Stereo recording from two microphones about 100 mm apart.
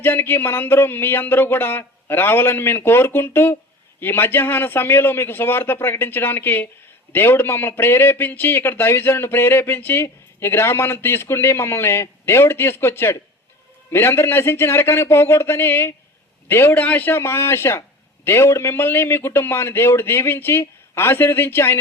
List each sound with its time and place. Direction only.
0.0 s a man's voice: 20° left (ahead or behind)